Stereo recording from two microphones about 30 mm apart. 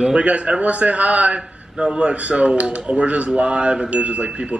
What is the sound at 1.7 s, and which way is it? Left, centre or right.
Speech, right.